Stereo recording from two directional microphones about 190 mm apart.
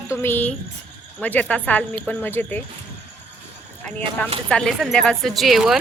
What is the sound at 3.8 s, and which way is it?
A man's voice, 10° left (ahead or behind).